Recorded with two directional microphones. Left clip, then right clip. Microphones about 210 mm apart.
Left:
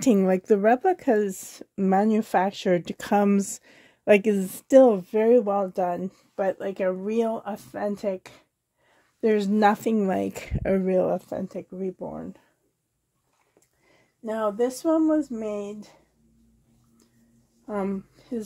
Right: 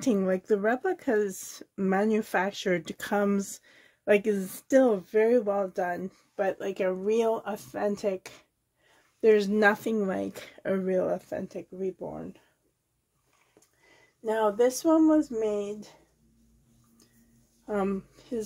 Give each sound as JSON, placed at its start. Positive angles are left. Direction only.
{"t": 0.0, "sound": "speech", "side_deg": 45}
{"t": 14.2, "sound": "speech", "side_deg": 20}
{"t": 17.6, "sound": "a woman's voice", "side_deg": 15}